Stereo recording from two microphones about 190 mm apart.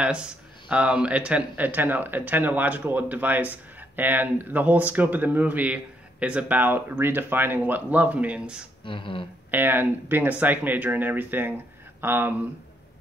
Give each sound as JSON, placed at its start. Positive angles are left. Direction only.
{"t": 0.0, "sound": "speech", "side_deg": -5}
{"t": 8.8, "sound": "speech", "side_deg": 25}
{"t": 9.5, "sound": "speech", "side_deg": -10}